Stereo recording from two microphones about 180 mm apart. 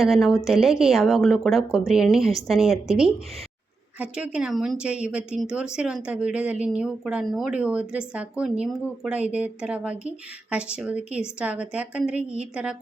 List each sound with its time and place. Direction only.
0.0 s a woman's voice: centre (ahead or behind)
3.9 s a woman's voice: 5° right (ahead or behind)